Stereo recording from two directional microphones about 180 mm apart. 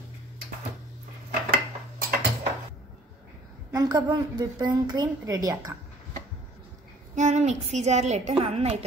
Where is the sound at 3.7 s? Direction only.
25° right (ahead or behind).